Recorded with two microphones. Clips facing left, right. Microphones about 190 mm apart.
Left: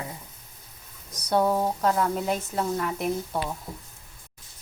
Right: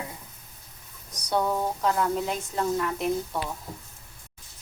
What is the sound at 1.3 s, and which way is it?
Speech, 15° left (ahead or behind).